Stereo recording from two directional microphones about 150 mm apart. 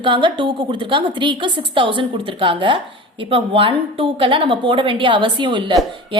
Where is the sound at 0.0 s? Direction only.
35° right (ahead or behind).